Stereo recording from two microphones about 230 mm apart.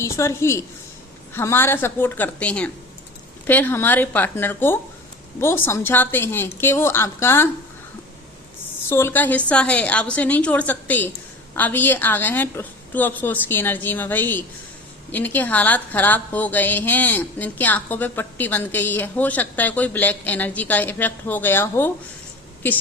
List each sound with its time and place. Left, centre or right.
0.0 s a woman's voice: centre
8.9 s a woman's voice: centre